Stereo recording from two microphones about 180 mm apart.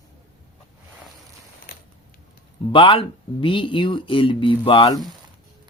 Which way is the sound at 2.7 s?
30° left (ahead or behind).